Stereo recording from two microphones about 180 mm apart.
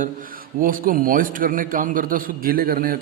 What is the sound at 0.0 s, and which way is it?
A man's voice, 50° right (ahead or behind).